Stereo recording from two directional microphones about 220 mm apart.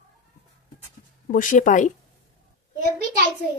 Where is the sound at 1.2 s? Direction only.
35° left (ahead or behind).